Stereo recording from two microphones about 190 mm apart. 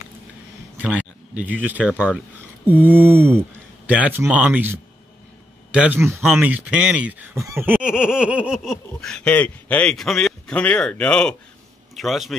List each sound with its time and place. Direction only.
0.8 s speech: 5° right (ahead or behind)